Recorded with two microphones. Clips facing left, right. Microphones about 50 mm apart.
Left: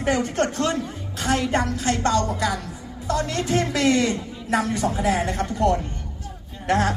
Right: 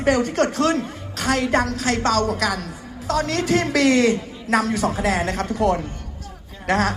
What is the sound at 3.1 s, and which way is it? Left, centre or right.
A woman's voice, right.